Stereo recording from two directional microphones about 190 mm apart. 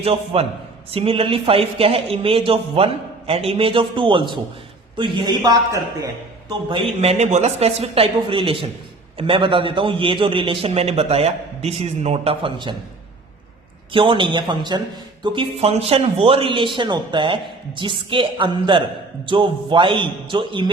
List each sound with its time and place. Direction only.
0.0 s a woman's voice: 30° right (ahead or behind)
13.9 s speech: 25° right (ahead or behind)